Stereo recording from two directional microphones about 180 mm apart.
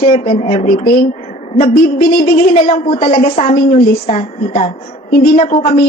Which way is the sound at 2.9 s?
35° left (ahead or behind).